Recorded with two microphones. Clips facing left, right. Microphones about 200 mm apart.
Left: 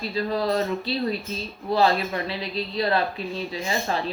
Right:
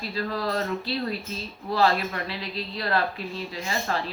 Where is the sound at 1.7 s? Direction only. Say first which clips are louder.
Left 2 dB; 20° left (ahead or behind).